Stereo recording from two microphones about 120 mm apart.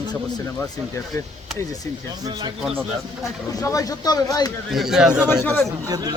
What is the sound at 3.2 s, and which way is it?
Speech, 25° left (ahead or behind).